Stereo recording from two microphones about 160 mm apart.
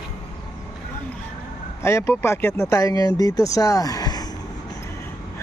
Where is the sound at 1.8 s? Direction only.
15° left (ahead or behind).